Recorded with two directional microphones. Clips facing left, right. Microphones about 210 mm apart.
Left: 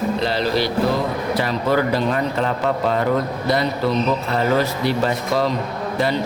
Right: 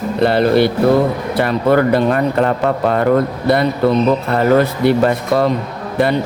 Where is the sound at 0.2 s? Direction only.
55° right (ahead or behind).